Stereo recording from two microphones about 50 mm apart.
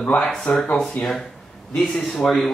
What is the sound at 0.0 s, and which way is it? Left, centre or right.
Speech, left.